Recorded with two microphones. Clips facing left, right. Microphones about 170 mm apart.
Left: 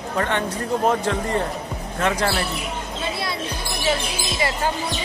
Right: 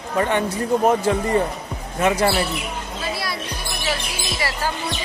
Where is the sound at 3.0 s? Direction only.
25° left (ahead or behind).